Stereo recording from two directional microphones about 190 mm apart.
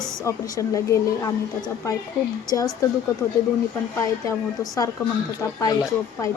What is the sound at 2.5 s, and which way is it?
Speech, 15° left (ahead or behind).